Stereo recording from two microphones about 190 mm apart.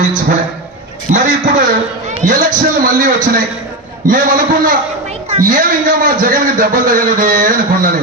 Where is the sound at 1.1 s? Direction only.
45° right (ahead or behind).